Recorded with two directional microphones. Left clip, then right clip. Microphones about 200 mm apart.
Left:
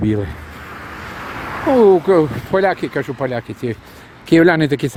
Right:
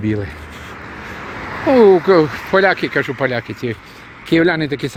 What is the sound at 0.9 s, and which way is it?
Vehicle, 40° left (ahead or behind).